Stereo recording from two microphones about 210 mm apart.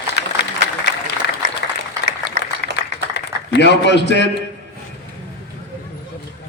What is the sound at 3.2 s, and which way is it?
A man's voice, 55° left (ahead or behind).